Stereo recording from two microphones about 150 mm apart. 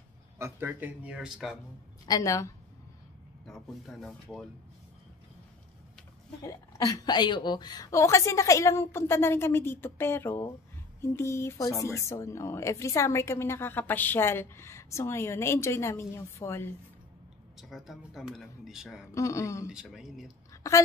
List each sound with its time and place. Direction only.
0.4 s speech: 15° right (ahead or behind)
2.0 s a woman's voice: 25° left (ahead or behind)
3.4 s speech: centre (ahead or behind)
6.4 s a woman's voice: 25° left (ahead or behind)
17.6 s speech: centre (ahead or behind)
19.1 s a woman's voice: 20° left (ahead or behind)
19.7 s speech: 5° right (ahead or behind)